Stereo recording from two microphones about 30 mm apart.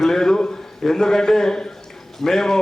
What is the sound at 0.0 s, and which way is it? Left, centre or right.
A man's voice, centre.